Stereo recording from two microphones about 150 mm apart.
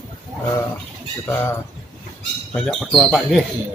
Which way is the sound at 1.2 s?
15° left (ahead or behind).